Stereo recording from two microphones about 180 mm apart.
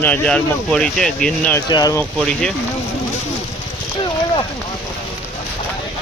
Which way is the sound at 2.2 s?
5° left (ahead or behind).